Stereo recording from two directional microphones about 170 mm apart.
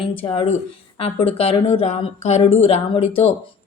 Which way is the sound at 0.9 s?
35° left (ahead or behind).